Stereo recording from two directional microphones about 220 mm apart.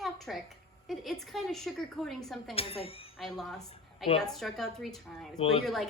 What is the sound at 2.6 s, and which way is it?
Speech, 25° left (ahead or behind).